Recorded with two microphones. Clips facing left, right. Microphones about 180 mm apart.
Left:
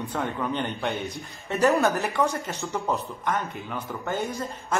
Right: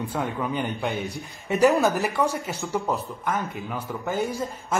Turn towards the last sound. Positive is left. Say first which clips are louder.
# right 2 dB
turn(degrees=0)  # may be behind; listen again after turning